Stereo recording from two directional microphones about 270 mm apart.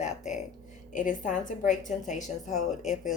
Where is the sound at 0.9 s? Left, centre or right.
Left.